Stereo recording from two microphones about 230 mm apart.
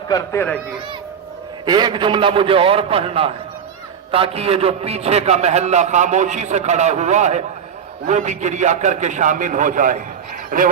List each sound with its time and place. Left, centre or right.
0.1 s speech: centre
1.6 s a man's voice: centre; by 10.7 s right